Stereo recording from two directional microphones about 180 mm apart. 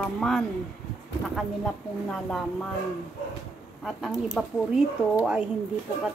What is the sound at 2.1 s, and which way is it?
Speech, 5° left (ahead or behind).